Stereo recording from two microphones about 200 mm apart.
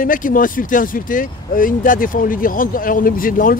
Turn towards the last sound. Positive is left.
turn(degrees=45)  # may be behind; listen again after turning